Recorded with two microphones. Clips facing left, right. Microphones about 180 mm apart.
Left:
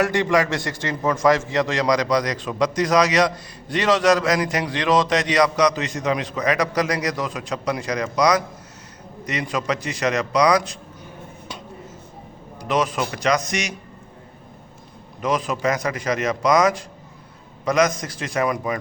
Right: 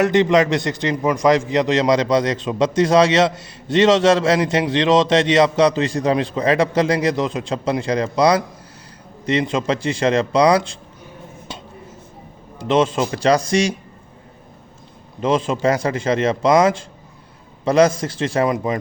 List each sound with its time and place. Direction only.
0.0 s a man's voice: 20° right (ahead or behind)
12.5 s a man's voice: 25° right (ahead or behind)
15.2 s a man's voice: 25° right (ahead or behind)